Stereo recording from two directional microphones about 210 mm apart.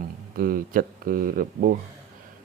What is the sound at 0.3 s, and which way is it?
Speech, 45° right (ahead or behind).